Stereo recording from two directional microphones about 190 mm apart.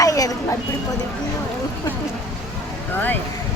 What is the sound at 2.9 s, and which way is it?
Speech, 10° left (ahead or behind).